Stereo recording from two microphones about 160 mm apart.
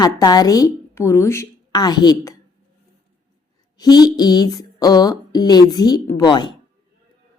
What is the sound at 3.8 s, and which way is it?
Speech, 25° left (ahead or behind).